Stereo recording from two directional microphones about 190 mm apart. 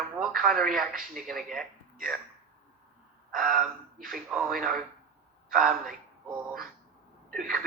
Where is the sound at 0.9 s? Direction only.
45° right (ahead or behind).